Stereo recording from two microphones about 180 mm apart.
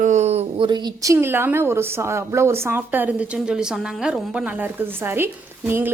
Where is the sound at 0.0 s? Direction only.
40° right (ahead or behind).